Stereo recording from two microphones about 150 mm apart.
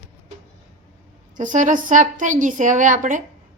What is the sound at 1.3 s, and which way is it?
A woman's voice, 55° right (ahead or behind).